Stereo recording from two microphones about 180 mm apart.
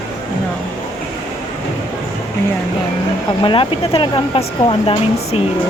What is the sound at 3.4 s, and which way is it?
Speech, 30° left (ahead or behind).